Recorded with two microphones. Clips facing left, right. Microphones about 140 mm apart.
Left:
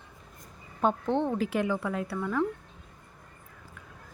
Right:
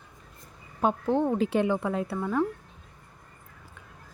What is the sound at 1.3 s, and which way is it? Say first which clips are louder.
Speech: right 3 dB; 25° right (ahead or behind).